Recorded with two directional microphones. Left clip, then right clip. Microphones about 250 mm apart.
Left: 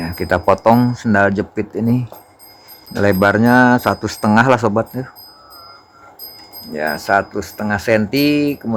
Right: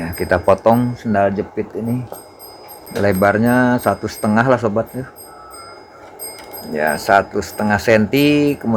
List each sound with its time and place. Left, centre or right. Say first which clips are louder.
0.0 s speech: even; centre
3.0 s speech: left 1 dB; centre
6.7 s speech: right 2 dB; centre